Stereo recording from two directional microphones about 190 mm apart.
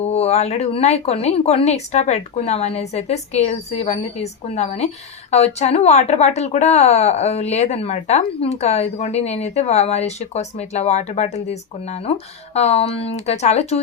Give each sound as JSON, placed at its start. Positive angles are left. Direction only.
{"t": 0.0, "sound": "speech", "side_deg": 35}